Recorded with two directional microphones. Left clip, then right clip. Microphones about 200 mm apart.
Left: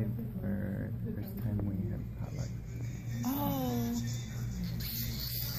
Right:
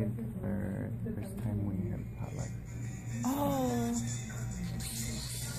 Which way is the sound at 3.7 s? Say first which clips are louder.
Right 2 dB; 30° right (ahead or behind).